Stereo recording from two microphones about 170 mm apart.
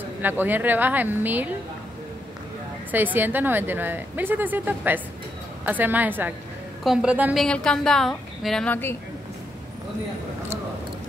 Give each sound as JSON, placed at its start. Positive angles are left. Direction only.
{"t": 0.2, "sound": "speech", "side_deg": -10}
{"t": 2.9, "sound": "a woman's voice", "side_deg": -10}
{"t": 7.4, "sound": "a woman's voice", "side_deg": 5}